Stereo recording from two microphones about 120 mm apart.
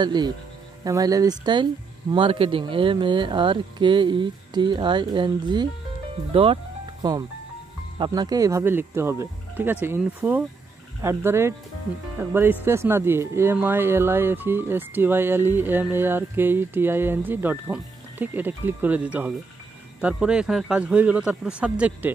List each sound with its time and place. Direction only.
0.0 s speech: 35° right (ahead or behind)
7.0 s speech: 35° right (ahead or behind); by 10.4 s 10° right (ahead or behind)
11.0 s speech: 20° right (ahead or behind)